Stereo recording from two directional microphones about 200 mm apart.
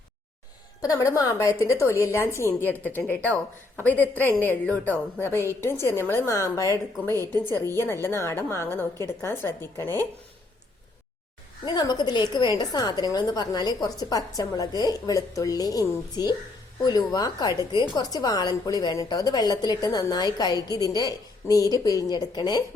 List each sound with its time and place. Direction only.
0.8 s a woman's voice: 15° left (ahead or behind)
11.6 s a woman's voice: 20° left (ahead or behind)